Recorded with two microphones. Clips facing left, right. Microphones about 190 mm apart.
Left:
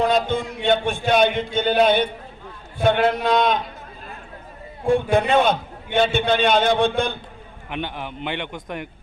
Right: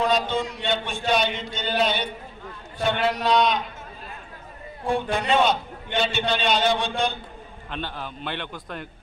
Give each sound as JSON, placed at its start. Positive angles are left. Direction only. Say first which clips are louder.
{"t": 0.1, "sound": "a man's voice", "louder": "left 3 dB", "side_deg": 55}
{"t": 5.1, "sound": "a man's voice", "louder": "left 2 dB", "side_deg": 55}
{"t": 7.7, "sound": "a man's voice", "louder": "left 4 dB", "side_deg": 15}